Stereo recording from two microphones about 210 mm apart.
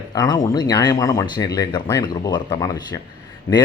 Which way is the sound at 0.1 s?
20° left (ahead or behind).